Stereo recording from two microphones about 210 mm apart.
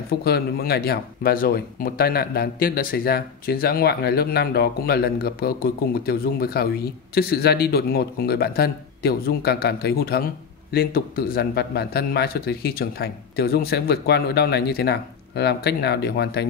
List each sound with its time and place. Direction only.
0.2 s speech: 50° left (ahead or behind)